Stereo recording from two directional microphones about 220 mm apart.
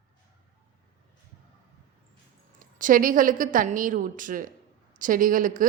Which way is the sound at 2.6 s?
35° right (ahead or behind).